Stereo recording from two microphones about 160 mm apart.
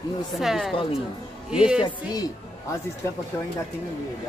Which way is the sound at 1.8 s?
25° left (ahead or behind).